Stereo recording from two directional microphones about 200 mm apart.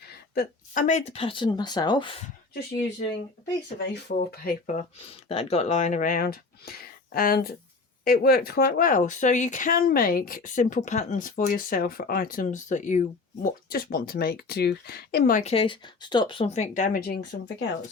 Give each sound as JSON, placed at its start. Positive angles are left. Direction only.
{"t": 0.3, "sound": "speech", "side_deg": 40}
{"t": 3.8, "sound": "speech", "side_deg": 55}